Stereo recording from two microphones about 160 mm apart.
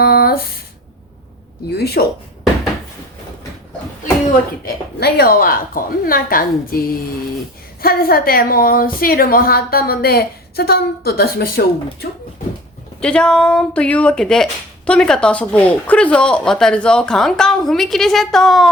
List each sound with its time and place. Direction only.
0.0 s a sound: 75° left (ahead or behind)
1.7 s a woman's voice: 80° left
4.6 s a woman's voice: 80° left
13.0 s speech: 5° left (ahead or behind)